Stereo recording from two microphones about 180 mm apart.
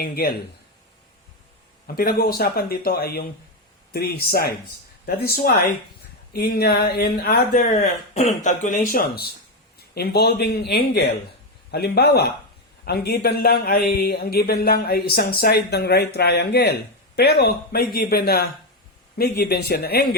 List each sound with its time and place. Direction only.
0.0 s a man's voice: 55° left (ahead or behind)
2.0 s a man's voice: 55° left (ahead or behind)
7.6 s a man's voice: 40° left (ahead or behind); by 20.1 s 60° left (ahead or behind)